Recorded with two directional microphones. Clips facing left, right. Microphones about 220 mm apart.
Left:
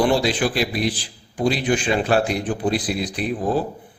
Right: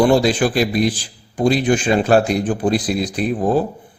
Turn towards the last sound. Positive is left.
turn(degrees=-45)  # may be behind; listen again after turning